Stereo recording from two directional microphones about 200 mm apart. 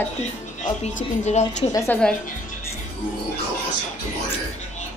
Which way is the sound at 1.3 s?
35° left (ahead or behind).